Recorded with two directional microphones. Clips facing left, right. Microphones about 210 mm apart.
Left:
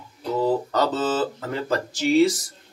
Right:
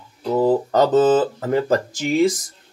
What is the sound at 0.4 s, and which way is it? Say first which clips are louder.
Speech: right 5 dB; 45° right (ahead or behind).